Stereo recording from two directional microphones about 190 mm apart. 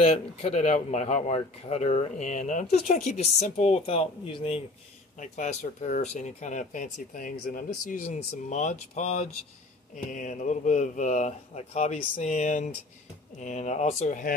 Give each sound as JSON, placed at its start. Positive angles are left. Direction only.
{"t": 0.0, "sound": "speech", "side_deg": 35}
{"t": 5.2, "sound": "speech", "side_deg": 40}